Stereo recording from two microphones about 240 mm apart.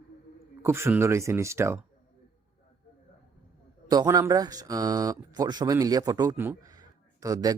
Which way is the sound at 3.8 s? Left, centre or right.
Centre.